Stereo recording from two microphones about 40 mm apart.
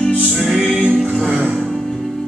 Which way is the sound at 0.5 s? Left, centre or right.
Right.